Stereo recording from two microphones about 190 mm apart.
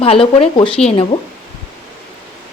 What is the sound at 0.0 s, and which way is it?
Speech, 30° left (ahead or behind).